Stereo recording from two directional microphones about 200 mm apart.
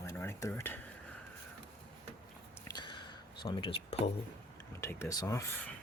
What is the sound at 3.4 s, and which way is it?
Speech, 25° left (ahead or behind).